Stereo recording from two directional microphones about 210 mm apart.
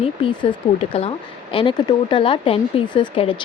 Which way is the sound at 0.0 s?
25° left (ahead or behind).